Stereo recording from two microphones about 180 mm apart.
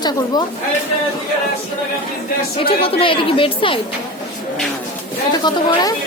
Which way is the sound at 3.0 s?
30° left (ahead or behind).